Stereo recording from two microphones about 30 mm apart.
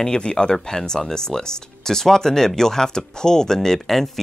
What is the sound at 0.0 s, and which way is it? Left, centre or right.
Speech, left.